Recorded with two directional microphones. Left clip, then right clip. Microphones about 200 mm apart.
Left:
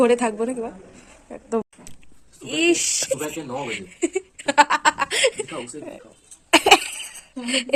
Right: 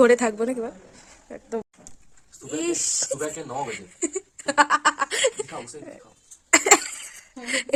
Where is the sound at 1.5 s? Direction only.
Centre (ahead or behind).